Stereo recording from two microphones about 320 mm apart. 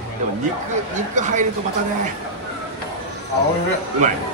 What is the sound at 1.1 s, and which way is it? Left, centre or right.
Speech, right.